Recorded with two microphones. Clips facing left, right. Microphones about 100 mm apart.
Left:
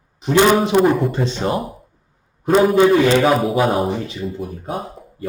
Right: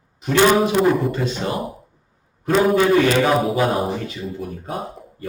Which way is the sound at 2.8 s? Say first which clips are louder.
Left 3 dB; 20° left (ahead or behind).